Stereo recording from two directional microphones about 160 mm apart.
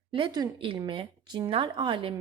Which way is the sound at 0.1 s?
30° right (ahead or behind).